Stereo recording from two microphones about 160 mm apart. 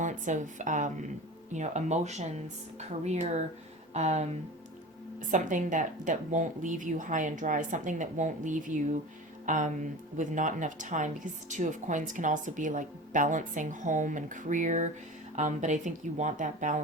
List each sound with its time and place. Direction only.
0.0 s speech: 50° right (ahead or behind)